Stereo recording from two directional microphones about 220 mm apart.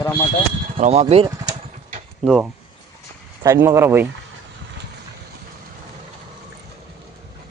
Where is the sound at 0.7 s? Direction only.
30° right (ahead or behind).